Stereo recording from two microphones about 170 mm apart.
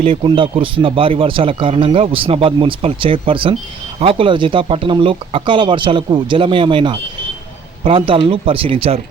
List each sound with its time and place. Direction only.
0.0 s speech: 30° right (ahead or behind)